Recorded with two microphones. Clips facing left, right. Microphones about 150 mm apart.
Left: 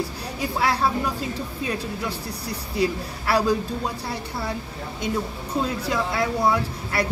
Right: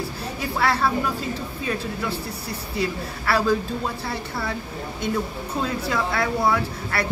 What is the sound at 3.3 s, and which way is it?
A woman's voice, 15° left (ahead or behind).